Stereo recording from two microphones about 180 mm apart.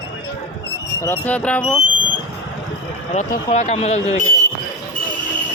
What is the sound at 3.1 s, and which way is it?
Speech, 40° left (ahead or behind).